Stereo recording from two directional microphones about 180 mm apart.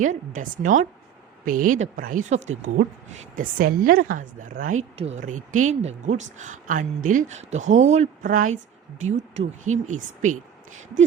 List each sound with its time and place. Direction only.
0.0 s a woman's voice: 45° right (ahead or behind)